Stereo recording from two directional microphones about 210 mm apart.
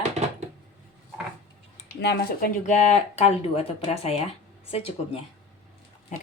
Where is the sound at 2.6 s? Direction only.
35° left (ahead or behind).